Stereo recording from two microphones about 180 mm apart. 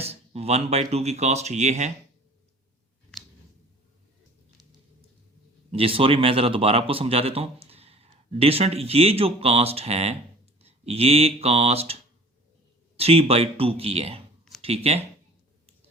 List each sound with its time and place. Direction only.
0.0 s speech: 35° right (ahead or behind)
5.7 s speech: 30° right (ahead or behind)
13.0 s speech: 35° right (ahead or behind)